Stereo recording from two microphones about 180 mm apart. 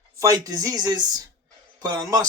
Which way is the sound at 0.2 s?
20° right (ahead or behind).